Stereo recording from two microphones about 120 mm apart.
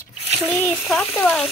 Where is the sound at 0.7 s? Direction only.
Centre (ahead or behind).